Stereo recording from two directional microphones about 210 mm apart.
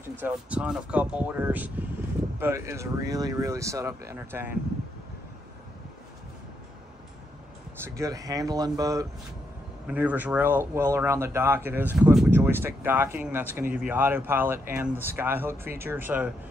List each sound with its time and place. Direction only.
0.2 s speech: 5° right (ahead or behind)
7.8 s speech: 15° right (ahead or behind)